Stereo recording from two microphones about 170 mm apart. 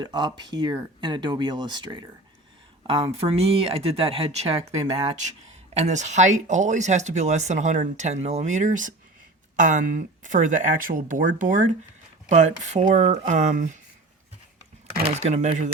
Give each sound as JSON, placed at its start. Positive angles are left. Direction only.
{"t": 0.0, "sound": "speech", "side_deg": -25}
{"t": 2.9, "sound": "speech", "side_deg": -35}
{"t": 15.0, "sound": "speech", "side_deg": -40}